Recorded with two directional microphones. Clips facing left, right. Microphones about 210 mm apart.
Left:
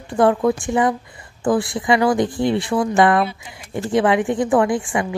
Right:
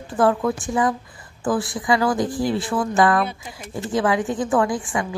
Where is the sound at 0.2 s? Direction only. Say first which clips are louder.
Left 3 dB; 20° left (ahead or behind).